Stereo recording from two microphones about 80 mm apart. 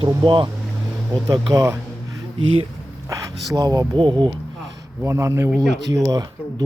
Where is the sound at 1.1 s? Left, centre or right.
Right.